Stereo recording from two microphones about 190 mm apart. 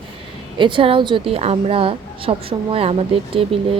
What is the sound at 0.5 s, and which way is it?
A woman's voice, 25° right (ahead or behind).